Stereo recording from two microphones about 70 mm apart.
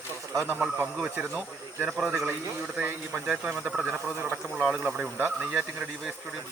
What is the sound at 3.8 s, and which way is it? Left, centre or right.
Speech, right.